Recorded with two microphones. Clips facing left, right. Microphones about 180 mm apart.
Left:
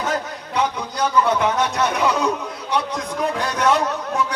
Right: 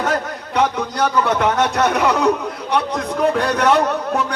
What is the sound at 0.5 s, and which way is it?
A man's voice, 60° right (ahead or behind).